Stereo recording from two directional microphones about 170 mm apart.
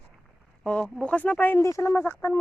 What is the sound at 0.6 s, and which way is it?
Speech, 5° left (ahead or behind).